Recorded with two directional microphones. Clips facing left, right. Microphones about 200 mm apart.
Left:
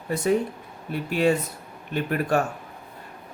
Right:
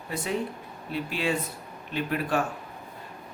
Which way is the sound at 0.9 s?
45° left (ahead or behind).